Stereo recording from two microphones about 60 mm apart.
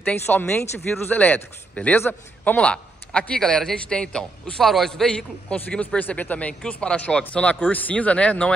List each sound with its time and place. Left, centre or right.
0.0 s speech: left
1.1 s a man's voice: left
5.9 s speech: left
6.6 s speech: centre